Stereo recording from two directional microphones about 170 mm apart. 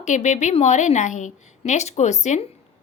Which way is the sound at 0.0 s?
45° left (ahead or behind).